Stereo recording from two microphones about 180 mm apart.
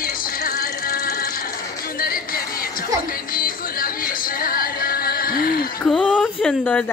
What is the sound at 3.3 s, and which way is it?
Music, 50° left (ahead or behind).